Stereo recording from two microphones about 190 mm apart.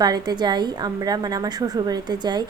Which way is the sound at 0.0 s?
20° right (ahead or behind).